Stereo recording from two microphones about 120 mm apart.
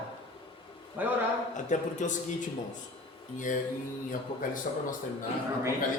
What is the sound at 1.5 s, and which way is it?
Speech, 90° left.